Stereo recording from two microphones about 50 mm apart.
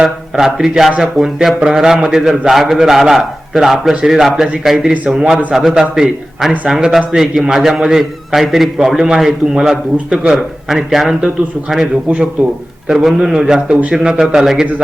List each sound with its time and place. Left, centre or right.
0.0 s a man's voice: centre
12.0 s speech: right
12.9 s a man's voice: centre
14.2 s a man's voice: centre